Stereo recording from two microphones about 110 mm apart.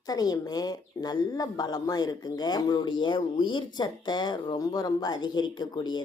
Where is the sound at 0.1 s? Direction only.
35° left (ahead or behind).